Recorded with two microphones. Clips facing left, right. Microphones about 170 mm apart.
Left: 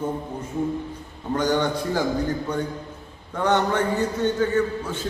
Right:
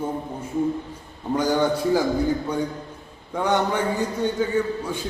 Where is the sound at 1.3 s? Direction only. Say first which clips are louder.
Right 1 dB; 10° right (ahead or behind).